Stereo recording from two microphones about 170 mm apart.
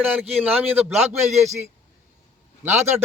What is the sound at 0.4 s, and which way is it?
Speech, 10° right (ahead or behind).